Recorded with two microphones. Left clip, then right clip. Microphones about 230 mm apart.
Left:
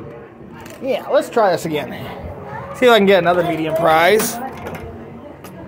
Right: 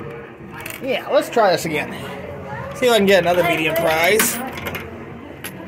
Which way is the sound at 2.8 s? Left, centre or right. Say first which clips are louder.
Left 3 dB; left.